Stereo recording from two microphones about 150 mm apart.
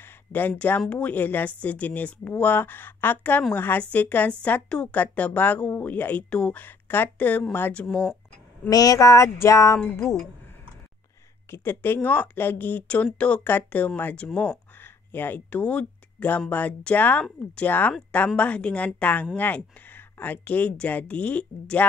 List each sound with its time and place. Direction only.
0.3 s speech: 10° left (ahead or behind)
8.6 s speech: 25° left (ahead or behind)
11.5 s speech: 15° left (ahead or behind)